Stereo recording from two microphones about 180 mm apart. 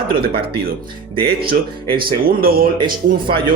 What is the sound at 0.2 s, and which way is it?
Speech, 60° right (ahead or behind).